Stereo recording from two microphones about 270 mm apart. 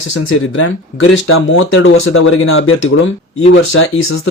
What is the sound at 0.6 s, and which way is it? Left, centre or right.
Speech, left.